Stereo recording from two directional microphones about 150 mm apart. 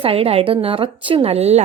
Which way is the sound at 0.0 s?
40° right (ahead or behind).